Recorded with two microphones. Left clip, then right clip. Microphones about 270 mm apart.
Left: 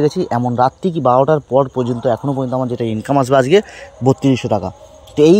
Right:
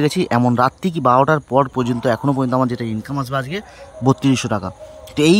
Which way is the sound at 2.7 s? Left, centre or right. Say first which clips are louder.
Left 9 dB; centre.